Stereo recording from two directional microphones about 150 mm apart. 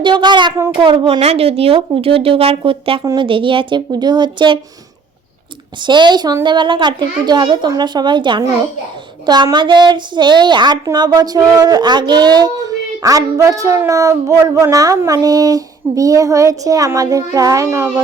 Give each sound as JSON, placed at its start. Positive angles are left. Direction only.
{"t": 0.0, "sound": "a woman's voice", "side_deg": -30}
{"t": 5.8, "sound": "a woman's voice", "side_deg": -30}